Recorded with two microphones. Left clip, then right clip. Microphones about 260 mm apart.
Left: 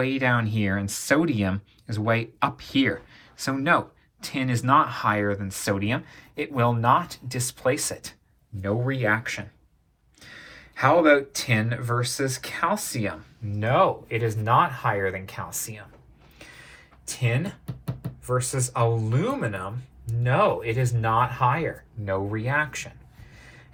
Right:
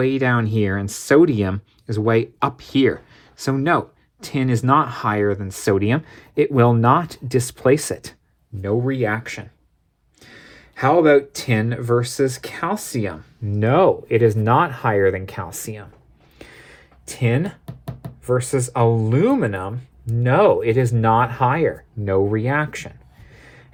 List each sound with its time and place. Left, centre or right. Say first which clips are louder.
0.0 s speech: right 4 dB; right
16.4 s music: right 3 dB; right
19.0 s speech: right 9 dB; right
23.4 s a sound: right 3 dB; right